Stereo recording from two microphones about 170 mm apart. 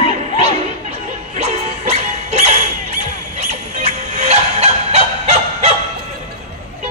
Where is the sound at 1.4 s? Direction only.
40° right (ahead or behind).